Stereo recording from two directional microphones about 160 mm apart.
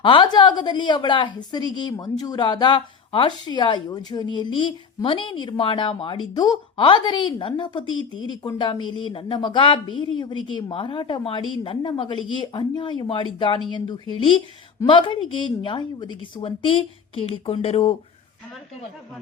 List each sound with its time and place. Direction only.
0.0 s a woman's voice: 30° left (ahead or behind)